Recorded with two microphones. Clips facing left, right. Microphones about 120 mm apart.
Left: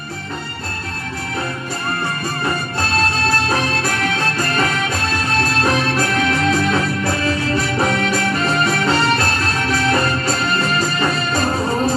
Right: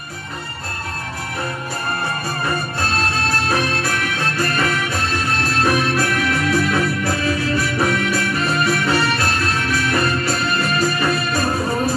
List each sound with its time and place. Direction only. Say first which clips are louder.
4.4 s music: right 2 dB; 25° left (ahead or behind)